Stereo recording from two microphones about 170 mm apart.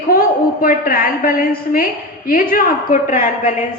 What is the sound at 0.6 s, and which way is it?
A woman's voice, 55° left (ahead or behind).